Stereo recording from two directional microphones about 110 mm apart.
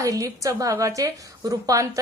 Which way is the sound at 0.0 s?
30° right (ahead or behind).